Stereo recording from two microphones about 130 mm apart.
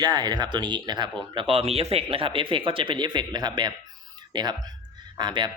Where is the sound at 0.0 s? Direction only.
30° right (ahead or behind).